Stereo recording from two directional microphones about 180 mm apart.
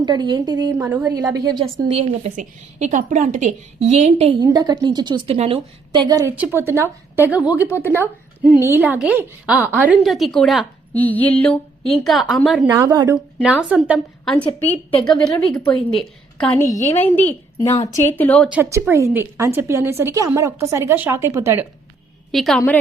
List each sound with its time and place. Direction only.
0.0 s a woman's voice: 25° right (ahead or behind)
0.8 s a woman's voice: 10° right (ahead or behind)
1.1 s a woman's voice: 20° right (ahead or behind)
1.8 s a woman's voice: 35° right (ahead or behind)
4.4 s a woman's voice: 20° right (ahead or behind)
6.3 s a woman's voice: 10° right (ahead or behind)
7.7 s a woman's voice: 15° left (ahead or behind)
8.4 s a woman's voice: 15° right (ahead or behind)
12.6 s a woman's voice: 20° right (ahead or behind)
13.1 s a woman's voice: 5° right (ahead or behind)
15.0 s a woman's voice: 5° left (ahead or behind)
18.5 s a woman's voice: 15° right (ahead or behind)
22.3 s a woman's voice: centre (ahead or behind)